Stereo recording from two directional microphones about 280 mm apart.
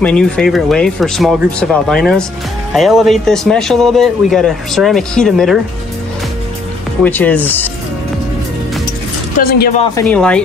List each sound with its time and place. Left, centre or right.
0.0 s speech: centre
7.1 s speech: centre
9.4 s speech: left
9.9 s speech: centre